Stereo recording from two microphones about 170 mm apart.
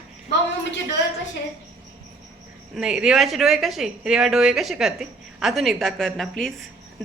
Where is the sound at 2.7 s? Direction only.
5° right (ahead or behind).